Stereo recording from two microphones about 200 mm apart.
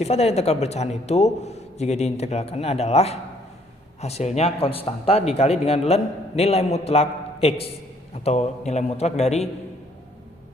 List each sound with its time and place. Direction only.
0.0 s speech: 30° left (ahead or behind)